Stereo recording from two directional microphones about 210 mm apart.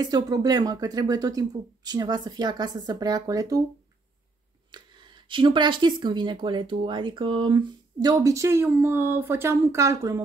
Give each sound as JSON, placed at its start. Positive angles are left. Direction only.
{"t": 0.0, "sound": "speech", "side_deg": -20}
{"t": 4.6, "sound": "speech", "side_deg": -20}